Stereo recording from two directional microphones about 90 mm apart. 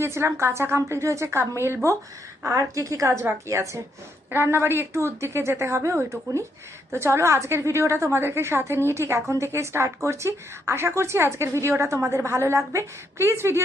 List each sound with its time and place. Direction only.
0.0 s a woman's voice: 30° right (ahead or behind)